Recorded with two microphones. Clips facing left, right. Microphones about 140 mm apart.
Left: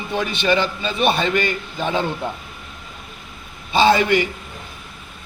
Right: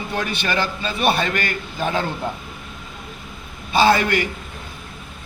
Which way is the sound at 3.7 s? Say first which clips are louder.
Left 1 dB; 20° left (ahead or behind).